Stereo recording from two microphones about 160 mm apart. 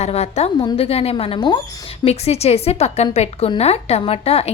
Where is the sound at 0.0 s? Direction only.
40° left (ahead or behind).